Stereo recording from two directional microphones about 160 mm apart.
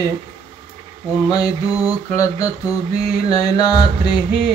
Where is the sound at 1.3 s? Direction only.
20° left (ahead or behind).